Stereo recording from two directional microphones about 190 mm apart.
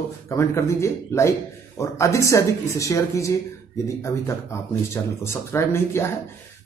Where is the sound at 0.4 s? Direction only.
15° left (ahead or behind).